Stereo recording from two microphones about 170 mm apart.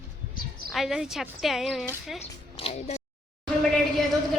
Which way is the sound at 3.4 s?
Centre (ahead or behind).